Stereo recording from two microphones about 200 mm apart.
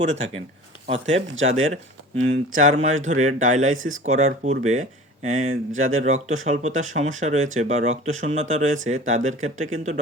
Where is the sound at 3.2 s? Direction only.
35° right (ahead or behind).